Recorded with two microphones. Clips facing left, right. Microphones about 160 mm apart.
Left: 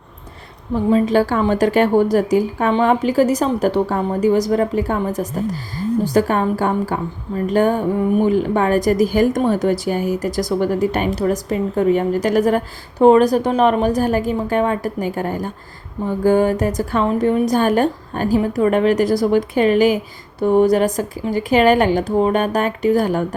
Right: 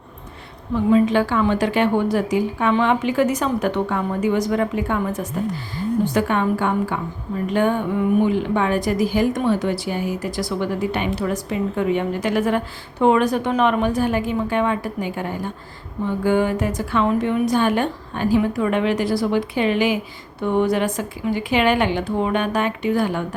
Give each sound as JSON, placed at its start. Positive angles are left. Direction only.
{"t": 0.9, "sound": "a woman's voice", "side_deg": 40}